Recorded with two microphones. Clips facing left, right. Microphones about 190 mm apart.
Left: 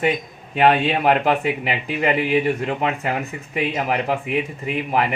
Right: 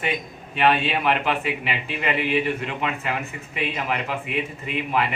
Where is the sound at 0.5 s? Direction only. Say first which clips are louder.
Left 4 dB; 45° left (ahead or behind).